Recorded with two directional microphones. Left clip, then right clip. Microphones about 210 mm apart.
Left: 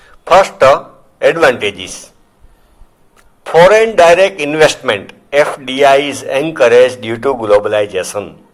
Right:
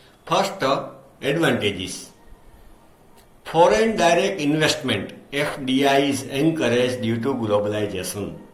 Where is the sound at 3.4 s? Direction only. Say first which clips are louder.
Left 10 dB; 50° left (ahead or behind).